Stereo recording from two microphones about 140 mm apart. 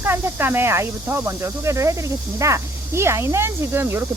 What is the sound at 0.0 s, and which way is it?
Speech, 15° right (ahead or behind).